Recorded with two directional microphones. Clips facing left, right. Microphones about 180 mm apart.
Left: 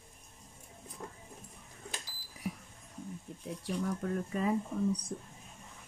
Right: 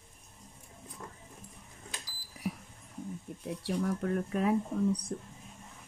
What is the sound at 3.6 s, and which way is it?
Speech, 60° right (ahead or behind).